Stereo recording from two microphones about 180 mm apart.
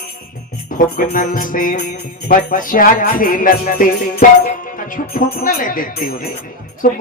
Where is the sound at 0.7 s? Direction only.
50° left (ahead or behind).